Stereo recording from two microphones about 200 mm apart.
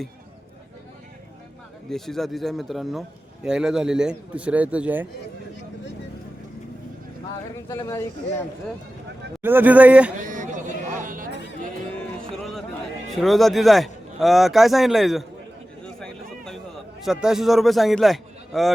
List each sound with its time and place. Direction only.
1.9 s speech: centre (ahead or behind)
7.7 s speech: 15° left (ahead or behind)
9.4 s a man's voice: 10° right (ahead or behind)
10.2 s a sound: 40° right (ahead or behind)
11.9 s music: centre (ahead or behind)
13.1 s speech: centre (ahead or behind)
16.0 s a sound: centre (ahead or behind)
17.0 s a man's voice: 5° right (ahead or behind)